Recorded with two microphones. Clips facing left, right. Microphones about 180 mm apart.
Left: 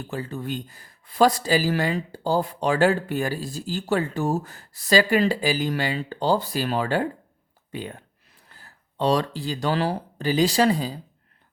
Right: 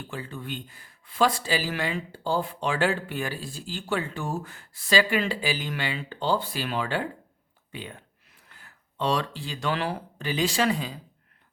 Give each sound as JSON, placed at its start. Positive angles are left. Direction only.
{"t": 0.0, "sound": "speech", "side_deg": 40}